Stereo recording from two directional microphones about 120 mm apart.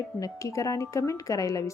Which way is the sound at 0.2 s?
25° left (ahead or behind).